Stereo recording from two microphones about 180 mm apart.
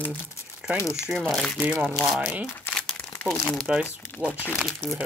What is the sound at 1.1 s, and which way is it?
Speech, 5° left (ahead or behind).